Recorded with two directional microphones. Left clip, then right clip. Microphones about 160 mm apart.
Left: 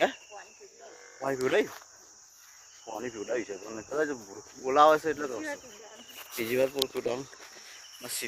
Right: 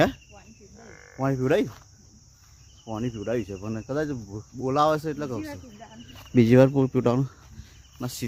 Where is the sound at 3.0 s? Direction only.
15° right (ahead or behind).